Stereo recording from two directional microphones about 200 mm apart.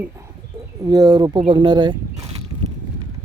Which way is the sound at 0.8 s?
20° right (ahead or behind).